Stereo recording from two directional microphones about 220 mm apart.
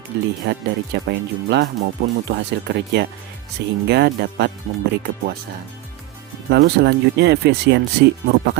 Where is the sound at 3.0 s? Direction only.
50° right (ahead or behind).